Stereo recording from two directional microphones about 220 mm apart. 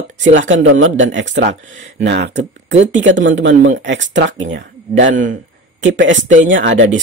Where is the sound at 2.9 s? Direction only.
55° right (ahead or behind).